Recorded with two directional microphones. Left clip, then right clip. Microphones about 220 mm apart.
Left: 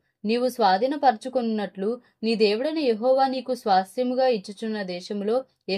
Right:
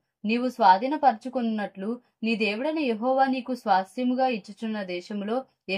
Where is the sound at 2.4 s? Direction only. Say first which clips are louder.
Left 5 dB; 35° left (ahead or behind).